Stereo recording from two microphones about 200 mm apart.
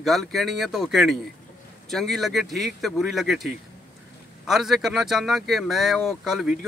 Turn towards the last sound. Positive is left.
turn(degrees=0)  # may be behind; listen again after turning